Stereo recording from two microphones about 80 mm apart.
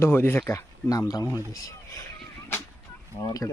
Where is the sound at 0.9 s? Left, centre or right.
Left.